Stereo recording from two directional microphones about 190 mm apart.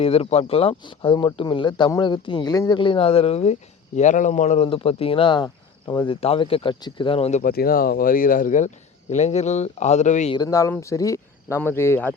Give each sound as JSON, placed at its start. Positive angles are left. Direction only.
{"t": 0.0, "sound": "speech", "side_deg": 30}
{"t": 7.5, "sound": "speech", "side_deg": 50}
{"t": 10.3, "sound": "speech", "side_deg": 20}